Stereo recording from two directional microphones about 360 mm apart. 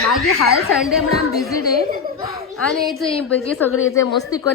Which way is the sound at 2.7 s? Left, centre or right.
Centre.